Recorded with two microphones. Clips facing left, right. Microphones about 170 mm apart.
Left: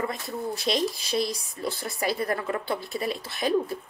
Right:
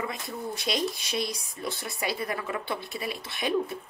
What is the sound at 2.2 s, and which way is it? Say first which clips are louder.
Speech: left 4 dB; 45° left (ahead or behind).